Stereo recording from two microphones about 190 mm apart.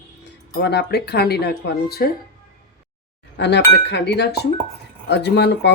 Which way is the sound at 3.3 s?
65° left (ahead or behind).